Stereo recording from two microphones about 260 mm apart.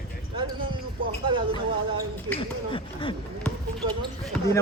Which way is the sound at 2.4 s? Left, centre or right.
Centre.